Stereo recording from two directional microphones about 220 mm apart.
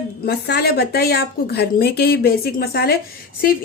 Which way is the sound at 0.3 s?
50° left (ahead or behind).